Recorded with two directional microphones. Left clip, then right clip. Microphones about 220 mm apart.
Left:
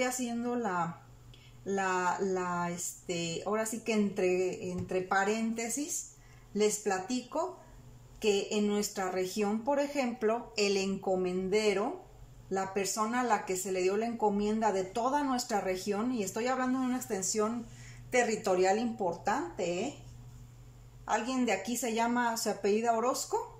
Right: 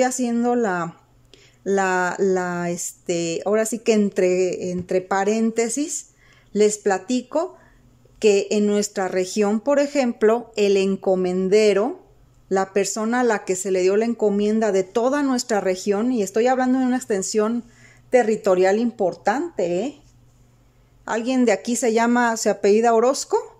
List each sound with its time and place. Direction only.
0.0 s speech: 50° right (ahead or behind)
21.0 s speech: 45° right (ahead or behind)